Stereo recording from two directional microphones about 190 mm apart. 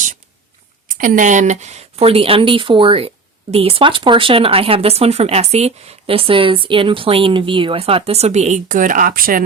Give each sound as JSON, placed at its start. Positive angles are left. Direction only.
{"t": 0.9, "sound": "a woman's voice", "side_deg": -45}